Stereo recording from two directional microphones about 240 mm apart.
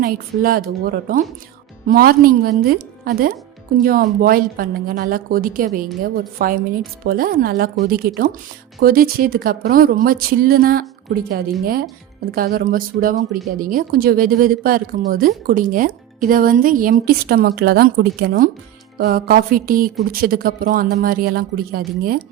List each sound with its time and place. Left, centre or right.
0.0 s speech: right